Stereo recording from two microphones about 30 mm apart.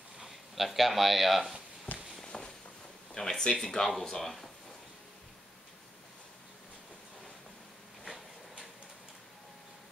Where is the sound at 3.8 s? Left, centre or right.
Centre.